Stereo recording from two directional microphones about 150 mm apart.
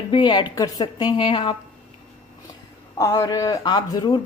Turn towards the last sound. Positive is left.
turn(degrees=30)  # may be behind; listen again after turning